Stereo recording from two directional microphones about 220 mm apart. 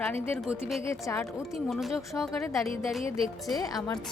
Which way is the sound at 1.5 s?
Centre (ahead or behind).